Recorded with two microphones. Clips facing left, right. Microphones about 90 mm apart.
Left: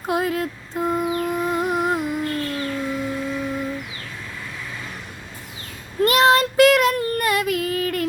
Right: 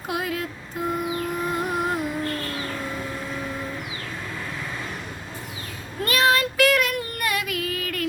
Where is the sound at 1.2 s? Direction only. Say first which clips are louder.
Left 4 dB; 20° left (ahead or behind).